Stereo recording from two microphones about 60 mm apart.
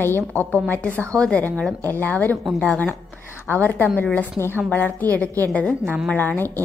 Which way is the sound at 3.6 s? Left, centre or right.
Left.